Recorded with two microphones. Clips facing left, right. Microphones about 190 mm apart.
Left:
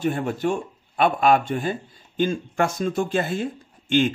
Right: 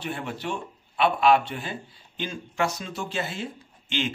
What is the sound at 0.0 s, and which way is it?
Speech, 45° left (ahead or behind).